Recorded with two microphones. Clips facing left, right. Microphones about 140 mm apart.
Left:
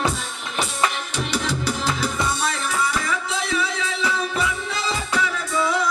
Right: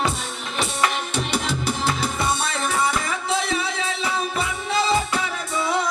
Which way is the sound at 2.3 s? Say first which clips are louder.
Right 1 dB; 30° right (ahead or behind).